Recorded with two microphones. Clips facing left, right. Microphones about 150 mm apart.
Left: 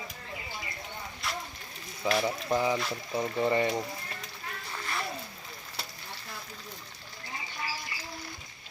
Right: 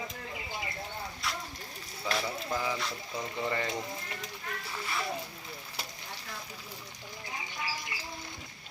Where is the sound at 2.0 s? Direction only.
25° left (ahead or behind).